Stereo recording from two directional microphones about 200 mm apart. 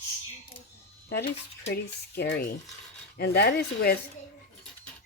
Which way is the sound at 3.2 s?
55° left (ahead or behind).